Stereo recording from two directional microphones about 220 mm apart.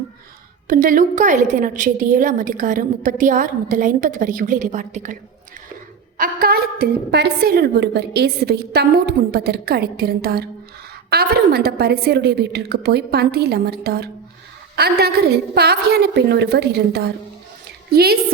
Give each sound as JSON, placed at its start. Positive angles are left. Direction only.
{"t": 0.7, "sound": "a woman's voice", "side_deg": -40}
{"t": 6.1, "sound": "a woman's voice", "side_deg": -40}